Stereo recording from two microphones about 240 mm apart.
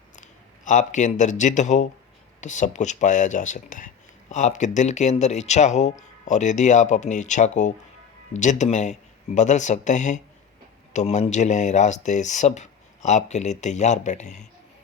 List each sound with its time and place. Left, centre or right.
0.2 s speech: left